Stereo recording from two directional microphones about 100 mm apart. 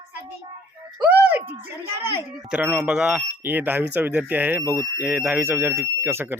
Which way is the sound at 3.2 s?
20° right (ahead or behind).